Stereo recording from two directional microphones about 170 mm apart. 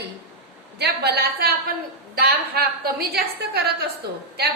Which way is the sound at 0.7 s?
75° right (ahead or behind).